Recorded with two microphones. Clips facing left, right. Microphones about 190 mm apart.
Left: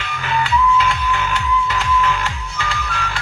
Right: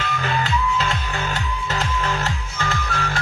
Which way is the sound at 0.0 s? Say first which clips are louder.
Left 1 dB; 45° right (ahead or behind).